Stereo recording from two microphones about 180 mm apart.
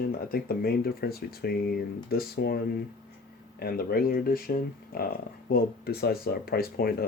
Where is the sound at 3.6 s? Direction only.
60° left (ahead or behind).